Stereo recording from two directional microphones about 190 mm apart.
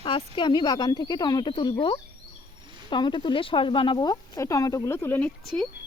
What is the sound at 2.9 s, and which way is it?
Speech, 25° left (ahead or behind).